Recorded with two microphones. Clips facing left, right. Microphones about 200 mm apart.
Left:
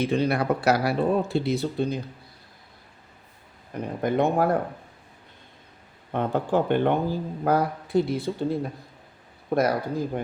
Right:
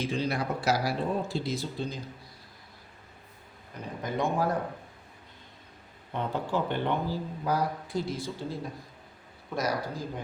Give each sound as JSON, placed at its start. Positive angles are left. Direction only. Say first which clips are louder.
{"t": 0.0, "sound": "speech", "louder": "left 7 dB", "side_deg": 60}
{"t": 4.0, "sound": "speech", "louder": "left 7 dB", "side_deg": 60}
{"t": 6.1, "sound": "speech", "louder": "left 7 dB", "side_deg": 55}